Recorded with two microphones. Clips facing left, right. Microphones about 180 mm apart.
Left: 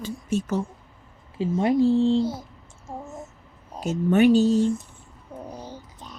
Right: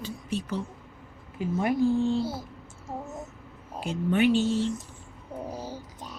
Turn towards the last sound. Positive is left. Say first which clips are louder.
# right 2 dB
turn(degrees=-10)  # may be behind; listen again after turning